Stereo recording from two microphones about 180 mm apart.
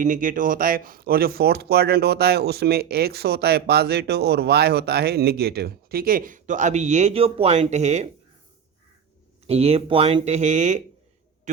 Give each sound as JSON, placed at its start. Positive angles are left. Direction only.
{"t": 0.0, "sound": "speech", "side_deg": -50}
{"t": 9.5, "sound": "speech", "side_deg": -35}